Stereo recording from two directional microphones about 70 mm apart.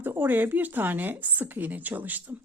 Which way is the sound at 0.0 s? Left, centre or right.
Right.